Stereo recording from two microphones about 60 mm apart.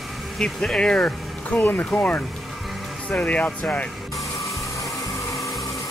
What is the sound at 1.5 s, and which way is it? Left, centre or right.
Speech, left.